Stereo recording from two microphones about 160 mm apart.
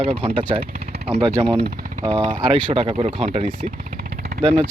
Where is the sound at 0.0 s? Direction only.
35° right (ahead or behind).